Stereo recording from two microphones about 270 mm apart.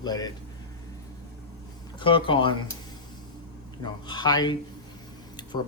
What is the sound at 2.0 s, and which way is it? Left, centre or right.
Speech, centre.